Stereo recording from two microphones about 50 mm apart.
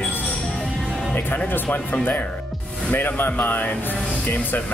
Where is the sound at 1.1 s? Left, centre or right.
Left.